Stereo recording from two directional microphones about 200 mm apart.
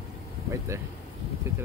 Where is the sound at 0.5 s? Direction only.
15° right (ahead or behind).